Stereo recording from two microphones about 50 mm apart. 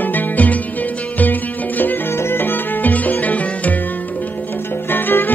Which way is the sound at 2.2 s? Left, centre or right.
Left.